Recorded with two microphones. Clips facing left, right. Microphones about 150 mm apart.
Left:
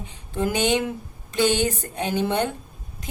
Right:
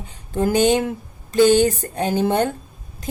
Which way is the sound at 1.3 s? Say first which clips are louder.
Right 7 dB; 45° right (ahead or behind).